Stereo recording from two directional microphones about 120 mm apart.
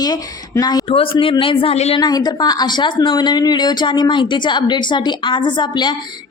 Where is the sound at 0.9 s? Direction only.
50° left (ahead or behind).